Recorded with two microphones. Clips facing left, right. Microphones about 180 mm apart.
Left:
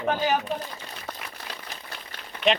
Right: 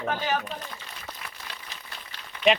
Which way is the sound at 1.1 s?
55° left (ahead or behind).